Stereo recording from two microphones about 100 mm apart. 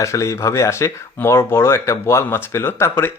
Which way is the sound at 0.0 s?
30° left (ahead or behind).